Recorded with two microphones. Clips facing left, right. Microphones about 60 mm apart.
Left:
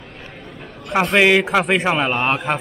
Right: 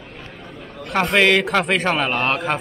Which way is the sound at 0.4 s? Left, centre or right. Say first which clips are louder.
Even; centre.